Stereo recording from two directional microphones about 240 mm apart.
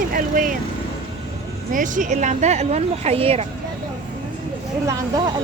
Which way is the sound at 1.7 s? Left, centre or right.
Right.